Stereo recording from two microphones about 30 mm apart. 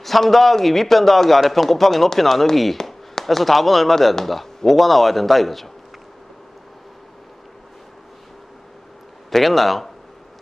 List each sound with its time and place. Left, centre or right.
0.0 s a man's voice: centre
3.2 s a sound: left
3.5 s a man's voice: centre
9.3 s a man's voice: centre